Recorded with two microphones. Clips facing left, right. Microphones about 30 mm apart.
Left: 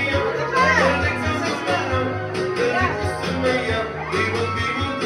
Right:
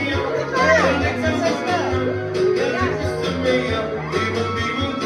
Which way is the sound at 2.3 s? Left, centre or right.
Left.